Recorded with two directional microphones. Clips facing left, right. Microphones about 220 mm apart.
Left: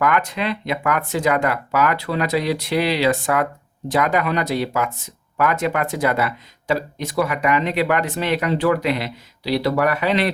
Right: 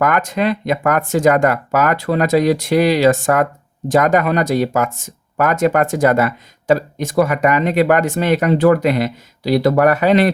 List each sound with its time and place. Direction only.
0.0 s speech: 45° right (ahead or behind)